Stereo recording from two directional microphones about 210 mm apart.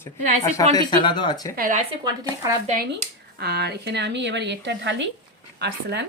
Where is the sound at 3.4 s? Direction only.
50° right (ahead or behind).